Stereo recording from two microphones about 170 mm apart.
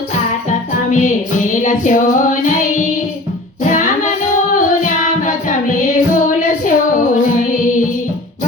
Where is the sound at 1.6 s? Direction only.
50° left (ahead or behind).